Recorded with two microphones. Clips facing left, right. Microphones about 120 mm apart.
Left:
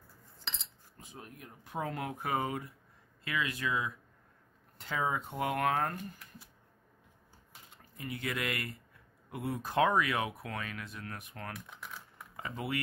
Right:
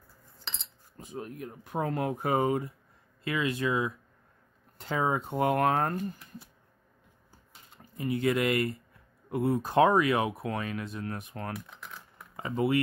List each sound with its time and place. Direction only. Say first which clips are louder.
1.1 s speech: right 11 dB; 50° right (ahead or behind); by 6.5 s 35° right (ahead or behind)
7.7 s speech: right 11 dB; 30° right (ahead or behind)